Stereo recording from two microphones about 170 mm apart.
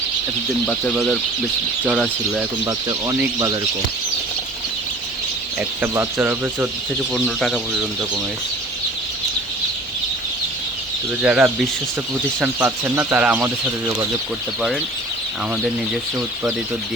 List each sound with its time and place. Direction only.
0.7 s speech: 5° left (ahead or behind)
1.8 s speech: 5° right (ahead or behind)
3.3 s speech: 25° right (ahead or behind)
5.5 s speech: 15° right (ahead or behind)
7.1 s speech: centre (ahead or behind)
11.2 s speech: 10° right (ahead or behind)
15.6 s speech: centre (ahead or behind)